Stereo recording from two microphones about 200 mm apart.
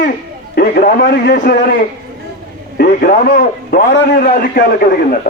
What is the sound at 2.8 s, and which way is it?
Speech, 45° left (ahead or behind).